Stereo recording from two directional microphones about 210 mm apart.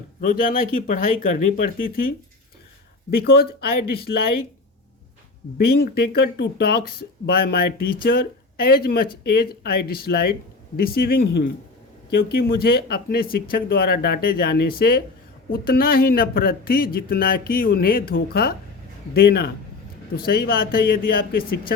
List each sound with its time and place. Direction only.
0.2 s speech: 40° left (ahead or behind)
3.1 s speech: 50° left (ahead or behind)
5.5 s speech: 50° left (ahead or behind)